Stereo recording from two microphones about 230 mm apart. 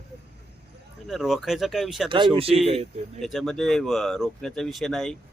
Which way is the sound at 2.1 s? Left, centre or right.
Right.